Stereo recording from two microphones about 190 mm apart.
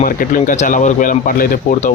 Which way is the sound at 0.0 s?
45° left (ahead or behind).